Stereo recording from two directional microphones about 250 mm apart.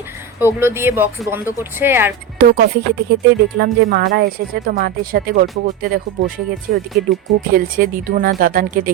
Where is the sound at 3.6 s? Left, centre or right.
Right.